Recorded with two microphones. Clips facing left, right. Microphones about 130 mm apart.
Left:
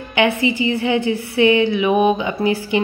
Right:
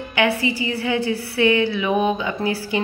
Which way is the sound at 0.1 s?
20° left (ahead or behind).